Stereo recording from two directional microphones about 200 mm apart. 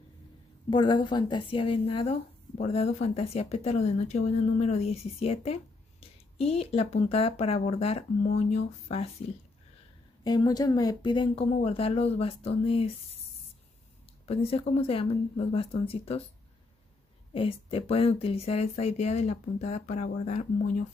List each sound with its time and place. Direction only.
0.7 s speech: 25° left (ahead or behind)
10.2 s speech: 20° left (ahead or behind)
14.2 s speech: 30° left (ahead or behind)
17.3 s speech: 30° left (ahead or behind)